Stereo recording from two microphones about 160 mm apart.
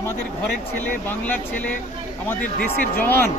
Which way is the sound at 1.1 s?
10° left (ahead or behind).